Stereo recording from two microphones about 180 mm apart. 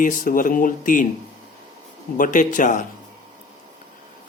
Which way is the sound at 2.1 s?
45° left (ahead or behind).